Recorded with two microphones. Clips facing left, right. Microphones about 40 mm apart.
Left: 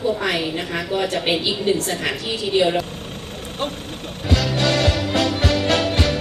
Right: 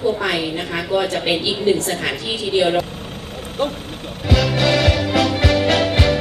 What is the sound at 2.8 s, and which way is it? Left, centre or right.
Vehicle, centre.